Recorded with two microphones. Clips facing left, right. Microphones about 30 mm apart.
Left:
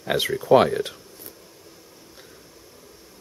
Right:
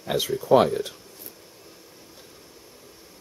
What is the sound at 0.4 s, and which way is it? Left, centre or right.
Speech, left.